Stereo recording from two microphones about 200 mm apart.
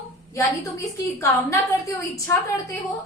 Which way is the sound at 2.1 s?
15° left (ahead or behind).